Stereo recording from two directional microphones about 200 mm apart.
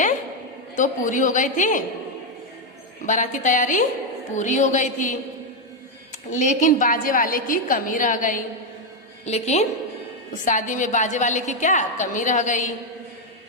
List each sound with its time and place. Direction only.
0.8 s a woman's voice: 40° left (ahead or behind)
3.1 s a woman's voice: 40° left (ahead or behind)
6.3 s a woman's voice: 40° left (ahead or behind)